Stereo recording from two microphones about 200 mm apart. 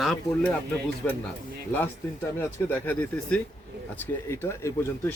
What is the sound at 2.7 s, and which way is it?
Speech, 10° left (ahead or behind).